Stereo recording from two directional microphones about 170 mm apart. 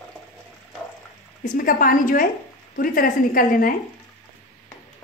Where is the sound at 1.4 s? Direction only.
55° left (ahead or behind).